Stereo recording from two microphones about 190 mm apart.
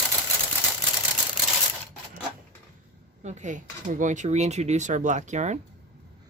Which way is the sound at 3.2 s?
40° right (ahead or behind).